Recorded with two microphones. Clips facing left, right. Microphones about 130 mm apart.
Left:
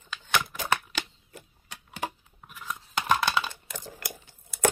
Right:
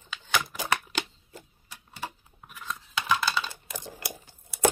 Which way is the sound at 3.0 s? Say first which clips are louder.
Left 2 dB; 60° left (ahead or behind).